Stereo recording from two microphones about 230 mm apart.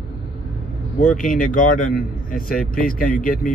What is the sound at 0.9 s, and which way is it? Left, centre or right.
Speech, left.